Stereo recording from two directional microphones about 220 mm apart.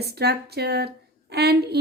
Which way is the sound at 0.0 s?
45° right (ahead or behind).